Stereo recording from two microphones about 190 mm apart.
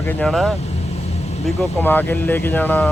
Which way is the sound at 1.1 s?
35° left (ahead or behind).